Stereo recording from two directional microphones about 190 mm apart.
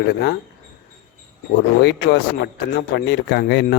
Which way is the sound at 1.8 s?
65° left (ahead or behind).